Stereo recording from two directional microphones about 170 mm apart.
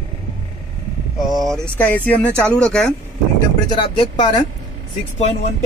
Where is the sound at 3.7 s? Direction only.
30° left (ahead or behind).